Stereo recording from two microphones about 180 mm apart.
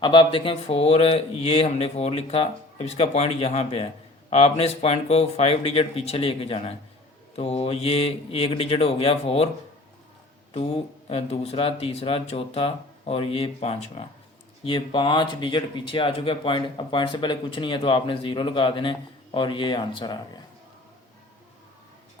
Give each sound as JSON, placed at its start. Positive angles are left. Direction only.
{"t": 0.0, "sound": "speech", "side_deg": 25}
{"t": 10.5, "sound": "speech", "side_deg": 35}